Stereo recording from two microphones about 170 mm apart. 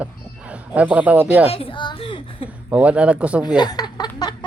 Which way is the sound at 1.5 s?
35° left (ahead or behind).